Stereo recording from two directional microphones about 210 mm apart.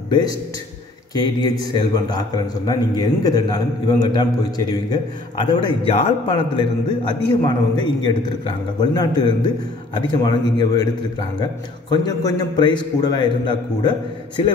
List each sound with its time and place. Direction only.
1.1 s a man's voice: 20° left (ahead or behind)